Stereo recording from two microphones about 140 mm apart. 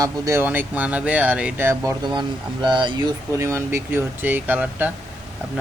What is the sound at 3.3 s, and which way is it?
Speech, 20° right (ahead or behind).